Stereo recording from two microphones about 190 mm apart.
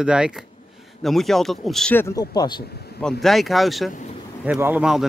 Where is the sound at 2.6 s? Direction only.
55° left (ahead or behind).